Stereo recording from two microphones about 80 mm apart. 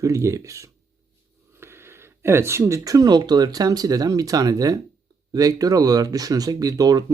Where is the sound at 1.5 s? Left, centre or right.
Right.